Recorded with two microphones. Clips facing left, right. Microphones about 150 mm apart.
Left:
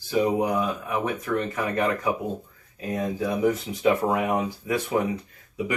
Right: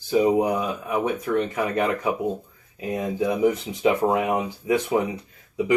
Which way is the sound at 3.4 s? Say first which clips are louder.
Left 1 dB; 20° right (ahead or behind).